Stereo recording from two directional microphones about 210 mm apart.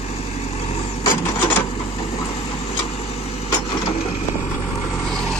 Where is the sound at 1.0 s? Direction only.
10° left (ahead or behind).